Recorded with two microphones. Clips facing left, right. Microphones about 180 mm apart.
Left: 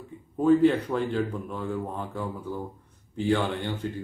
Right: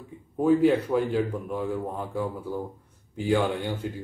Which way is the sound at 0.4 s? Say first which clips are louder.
Even; 10° right (ahead or behind).